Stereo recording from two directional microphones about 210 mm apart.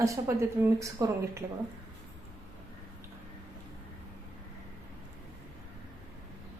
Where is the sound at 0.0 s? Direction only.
15° right (ahead or behind).